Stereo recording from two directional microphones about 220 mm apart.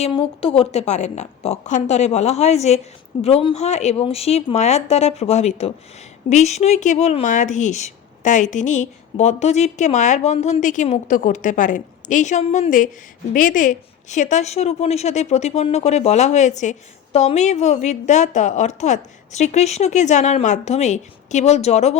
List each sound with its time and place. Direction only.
0.0 s a woman's voice: 25° left (ahead or behind)